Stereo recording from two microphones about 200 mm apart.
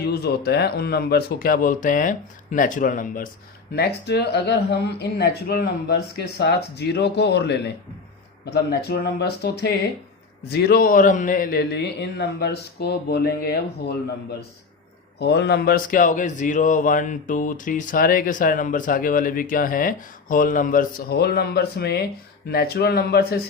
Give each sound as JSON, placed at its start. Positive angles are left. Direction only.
{"t": 0.0, "sound": "speech", "side_deg": 55}
{"t": 3.7, "sound": "speech", "side_deg": 55}
{"t": 15.2, "sound": "speech", "side_deg": 55}